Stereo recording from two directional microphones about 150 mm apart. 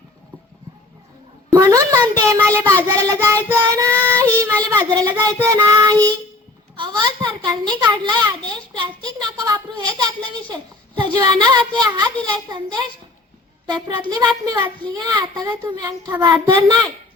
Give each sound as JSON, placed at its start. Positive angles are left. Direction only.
{"t": 1.5, "sound": "child singing", "side_deg": -25}
{"t": 6.7, "sound": "a child's voice", "side_deg": -30}